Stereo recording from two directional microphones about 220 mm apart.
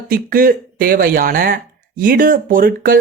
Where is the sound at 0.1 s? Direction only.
40° right (ahead or behind).